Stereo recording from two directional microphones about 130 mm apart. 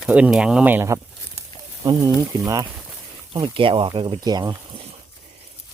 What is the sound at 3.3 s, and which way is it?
Speech, 40° right (ahead or behind).